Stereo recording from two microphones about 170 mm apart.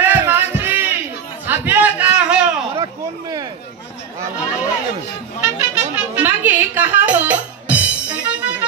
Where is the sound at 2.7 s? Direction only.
25° right (ahead or behind).